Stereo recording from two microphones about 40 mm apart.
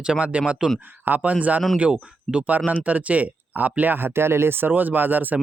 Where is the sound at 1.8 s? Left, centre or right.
Right.